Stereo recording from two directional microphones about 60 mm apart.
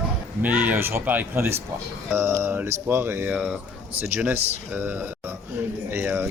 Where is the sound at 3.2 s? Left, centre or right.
Centre.